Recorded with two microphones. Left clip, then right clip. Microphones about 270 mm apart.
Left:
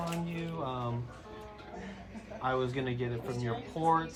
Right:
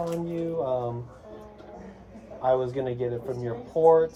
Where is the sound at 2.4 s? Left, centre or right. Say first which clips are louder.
Right 8 dB; left.